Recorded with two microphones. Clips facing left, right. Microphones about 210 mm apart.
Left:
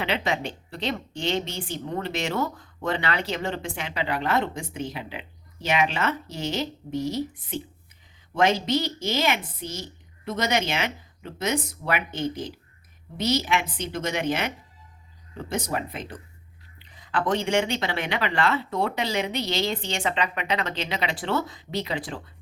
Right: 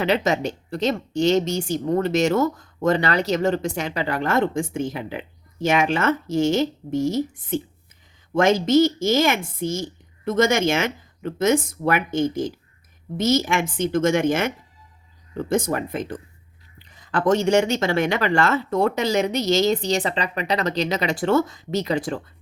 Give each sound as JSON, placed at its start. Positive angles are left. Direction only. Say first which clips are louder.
{"t": 0.0, "sound": "a woman's voice", "louder": "right 6 dB", "side_deg": -45}